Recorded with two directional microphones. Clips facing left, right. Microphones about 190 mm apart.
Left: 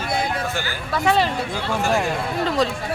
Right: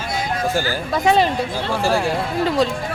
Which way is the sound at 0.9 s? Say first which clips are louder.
Right 3 dB; 15° right (ahead or behind).